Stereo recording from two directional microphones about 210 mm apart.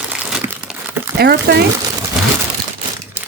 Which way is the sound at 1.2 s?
50° right (ahead or behind).